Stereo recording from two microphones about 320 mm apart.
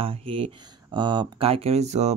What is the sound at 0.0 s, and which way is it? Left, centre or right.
Speech, centre.